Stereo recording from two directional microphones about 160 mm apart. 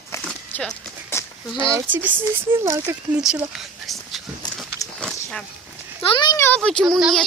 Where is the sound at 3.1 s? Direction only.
5° right (ahead or behind).